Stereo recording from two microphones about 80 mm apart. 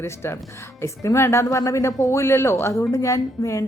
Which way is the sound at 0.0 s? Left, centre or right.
Left.